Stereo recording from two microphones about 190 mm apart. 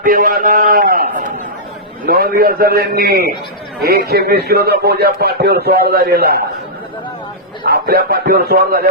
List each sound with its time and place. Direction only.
0.0 s a man's voice: 45° right (ahead or behind)
7.6 s speech: 55° right (ahead or behind)